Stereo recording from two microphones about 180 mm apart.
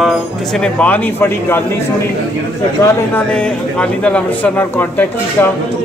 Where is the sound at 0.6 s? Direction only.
10° left (ahead or behind).